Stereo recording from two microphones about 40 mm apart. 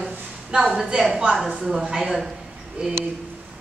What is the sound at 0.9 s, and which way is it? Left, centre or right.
Speech, right.